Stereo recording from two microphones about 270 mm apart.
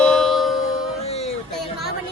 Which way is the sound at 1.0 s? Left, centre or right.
Left.